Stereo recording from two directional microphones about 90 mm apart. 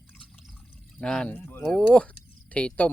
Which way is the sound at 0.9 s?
10° left (ahead or behind).